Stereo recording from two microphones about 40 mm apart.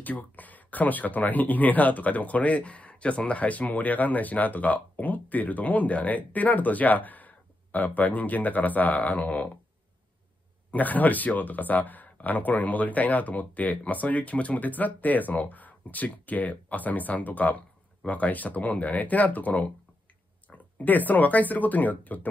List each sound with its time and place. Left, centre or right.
0.0 s speech: left
10.7 s speech: left